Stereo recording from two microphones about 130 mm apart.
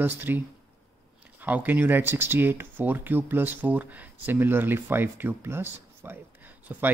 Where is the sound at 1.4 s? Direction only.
15° right (ahead or behind).